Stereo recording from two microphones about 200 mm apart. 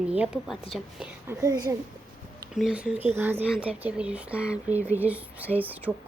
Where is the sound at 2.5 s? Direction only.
5° right (ahead or behind).